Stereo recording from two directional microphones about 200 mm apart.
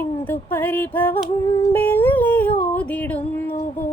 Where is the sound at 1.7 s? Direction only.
10° left (ahead or behind).